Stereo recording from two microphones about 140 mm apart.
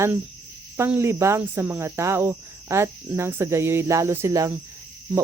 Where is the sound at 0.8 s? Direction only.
15° right (ahead or behind).